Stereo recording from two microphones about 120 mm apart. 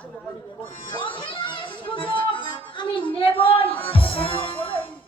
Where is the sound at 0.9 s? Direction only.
45° left (ahead or behind).